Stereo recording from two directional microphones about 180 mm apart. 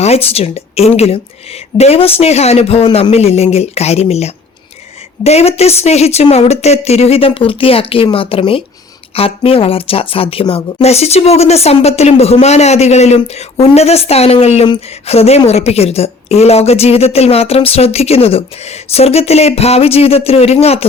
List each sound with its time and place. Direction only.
0.0 s speech: 35° left (ahead or behind)